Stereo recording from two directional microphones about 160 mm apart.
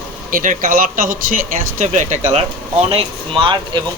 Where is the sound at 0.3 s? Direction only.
55° right (ahead or behind).